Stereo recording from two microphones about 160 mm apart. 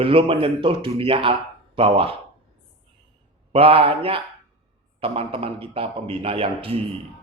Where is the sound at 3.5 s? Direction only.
35° right (ahead or behind).